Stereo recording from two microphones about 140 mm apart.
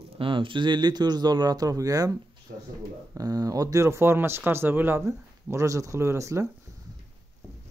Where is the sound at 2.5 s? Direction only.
90° right.